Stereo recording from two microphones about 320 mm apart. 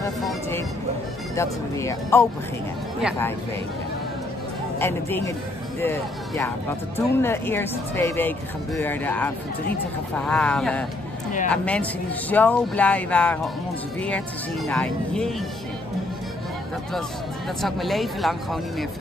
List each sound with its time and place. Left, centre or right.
0.0 s vehicle: centre
1.3 s speech: centre
4.7 s speech: centre
17.6 s speech: centre